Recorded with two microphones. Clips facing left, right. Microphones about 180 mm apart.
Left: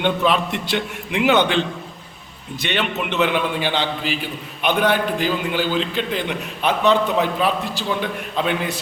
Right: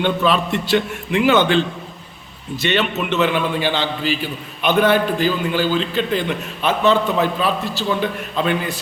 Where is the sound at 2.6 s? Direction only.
15° left (ahead or behind).